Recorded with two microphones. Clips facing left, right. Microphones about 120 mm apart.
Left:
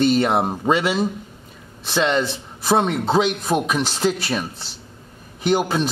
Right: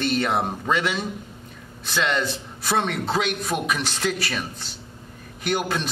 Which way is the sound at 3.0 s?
30° left (ahead or behind).